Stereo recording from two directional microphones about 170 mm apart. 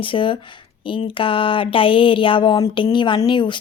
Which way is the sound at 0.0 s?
30° left (ahead or behind).